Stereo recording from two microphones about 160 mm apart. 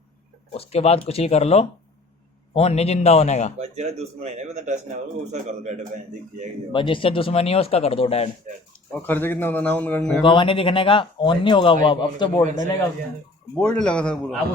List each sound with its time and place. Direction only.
0.5 s a man's voice: 40° left (ahead or behind)
3.6 s speech: 40° right (ahead or behind)
6.7 s a man's voice: 30° left (ahead or behind)
8.9 s a man's voice: 10° left (ahead or behind)
10.2 s a man's voice: 30° left (ahead or behind)
13.6 s a man's voice: 5° left (ahead or behind)